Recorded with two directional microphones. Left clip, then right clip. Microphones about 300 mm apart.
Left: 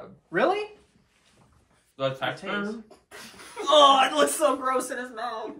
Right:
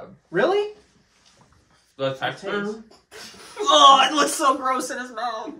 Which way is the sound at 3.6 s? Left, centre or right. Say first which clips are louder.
Right 4 dB; centre.